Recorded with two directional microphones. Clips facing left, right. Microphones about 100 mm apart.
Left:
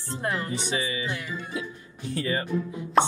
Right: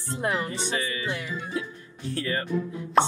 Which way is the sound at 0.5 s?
15° left (ahead or behind).